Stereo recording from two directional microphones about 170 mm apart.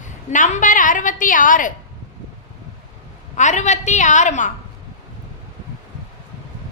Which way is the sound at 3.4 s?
45° left (ahead or behind).